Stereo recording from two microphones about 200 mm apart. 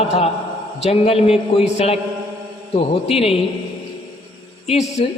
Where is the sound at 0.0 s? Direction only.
30° left (ahead or behind).